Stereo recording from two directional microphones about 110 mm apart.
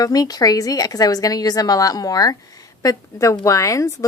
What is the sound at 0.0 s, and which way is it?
Speech, 35° left (ahead or behind).